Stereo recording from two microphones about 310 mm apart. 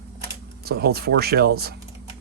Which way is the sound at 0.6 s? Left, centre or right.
Right.